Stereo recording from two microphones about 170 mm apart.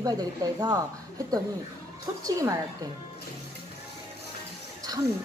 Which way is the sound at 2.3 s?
20° right (ahead or behind).